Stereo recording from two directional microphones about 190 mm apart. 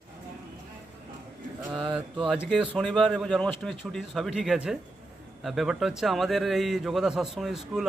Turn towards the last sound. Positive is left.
turn(degrees=0)  # may be behind; listen again after turning